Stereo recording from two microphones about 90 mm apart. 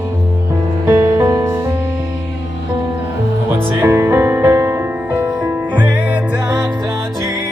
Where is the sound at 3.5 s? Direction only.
25° right (ahead or behind).